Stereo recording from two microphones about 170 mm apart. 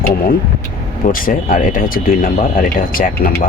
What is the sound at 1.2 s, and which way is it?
Speech, 55° left (ahead or behind).